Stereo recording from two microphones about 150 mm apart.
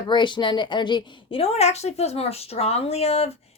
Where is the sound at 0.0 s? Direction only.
30° left (ahead or behind).